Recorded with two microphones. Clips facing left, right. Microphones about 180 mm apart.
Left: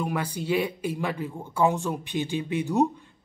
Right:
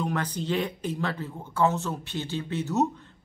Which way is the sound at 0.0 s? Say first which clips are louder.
Even; 10° left (ahead or behind).